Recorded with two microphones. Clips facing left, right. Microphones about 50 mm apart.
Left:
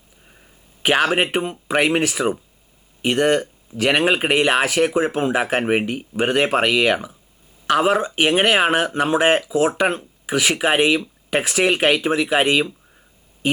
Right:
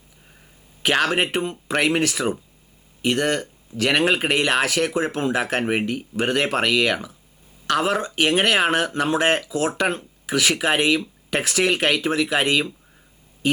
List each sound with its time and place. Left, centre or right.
0.3 s speech: centre